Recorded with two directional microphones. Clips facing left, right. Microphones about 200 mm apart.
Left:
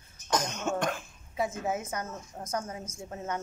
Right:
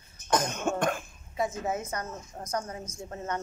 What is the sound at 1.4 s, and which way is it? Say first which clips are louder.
Speech: right 1 dB; 5° left (ahead or behind).